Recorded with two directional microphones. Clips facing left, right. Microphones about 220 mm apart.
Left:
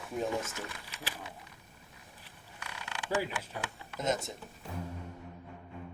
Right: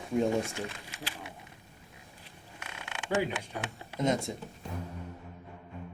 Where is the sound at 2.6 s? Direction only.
25° right (ahead or behind).